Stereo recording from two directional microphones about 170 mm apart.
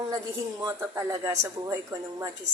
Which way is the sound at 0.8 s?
20° right (ahead or behind).